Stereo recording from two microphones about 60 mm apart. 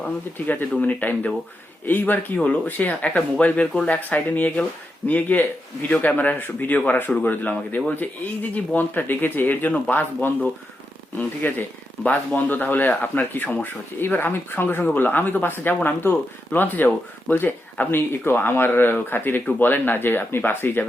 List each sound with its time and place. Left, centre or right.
0.0 s a man's voice: left